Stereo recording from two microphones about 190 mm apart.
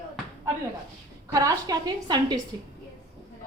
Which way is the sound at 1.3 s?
20° right (ahead or behind).